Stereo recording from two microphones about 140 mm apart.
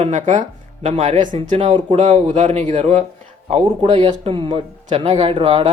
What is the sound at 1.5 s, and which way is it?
Speech, 35° right (ahead or behind).